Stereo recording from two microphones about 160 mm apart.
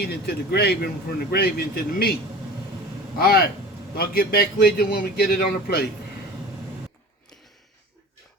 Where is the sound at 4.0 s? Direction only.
75° left (ahead or behind).